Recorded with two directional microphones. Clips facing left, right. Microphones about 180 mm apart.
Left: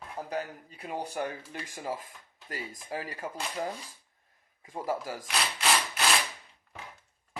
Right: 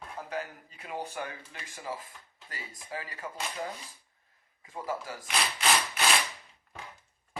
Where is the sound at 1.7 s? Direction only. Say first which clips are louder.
Left 2 dB; 45° left (ahead or behind).